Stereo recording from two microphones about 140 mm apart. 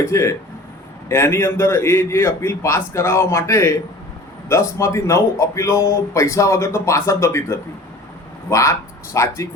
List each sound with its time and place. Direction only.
0.0 s speech: 20° left (ahead or behind)